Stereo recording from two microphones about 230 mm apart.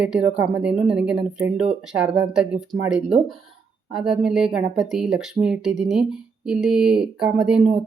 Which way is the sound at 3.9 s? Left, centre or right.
Centre.